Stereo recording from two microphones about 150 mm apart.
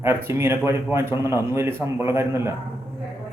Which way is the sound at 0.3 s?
15° right (ahead or behind).